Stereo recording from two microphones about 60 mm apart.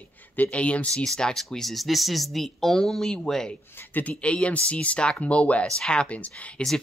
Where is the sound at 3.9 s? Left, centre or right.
Left.